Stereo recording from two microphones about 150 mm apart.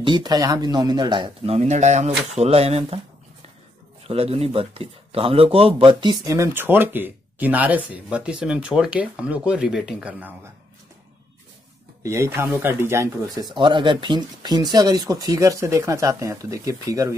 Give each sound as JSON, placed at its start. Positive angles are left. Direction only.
{"t": 0.0, "sound": "speech", "side_deg": -30}
{"t": 1.4, "sound": "speech", "side_deg": -45}
{"t": 4.1, "sound": "speech", "side_deg": -40}
{"t": 12.0, "sound": "speech", "side_deg": -20}